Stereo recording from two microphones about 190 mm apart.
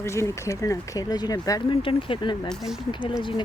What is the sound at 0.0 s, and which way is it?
Speech, 15° left (ahead or behind).